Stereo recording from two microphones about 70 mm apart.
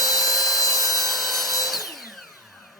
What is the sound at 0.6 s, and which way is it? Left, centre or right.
Wood, left.